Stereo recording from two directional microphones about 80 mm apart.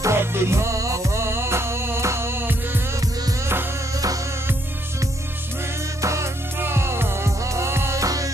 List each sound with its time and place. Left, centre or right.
0.0 s music: right
5.9 s music: right